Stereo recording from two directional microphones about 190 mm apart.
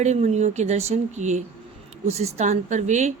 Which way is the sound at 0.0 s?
35° right (ahead or behind).